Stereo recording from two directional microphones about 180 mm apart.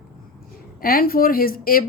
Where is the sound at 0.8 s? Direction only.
55° left (ahead or behind).